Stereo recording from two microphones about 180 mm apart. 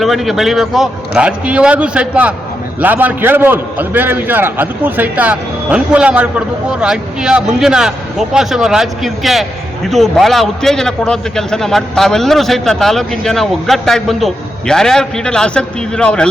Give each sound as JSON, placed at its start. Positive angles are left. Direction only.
{"t": 0.0, "sound": "a man's voice", "side_deg": 0}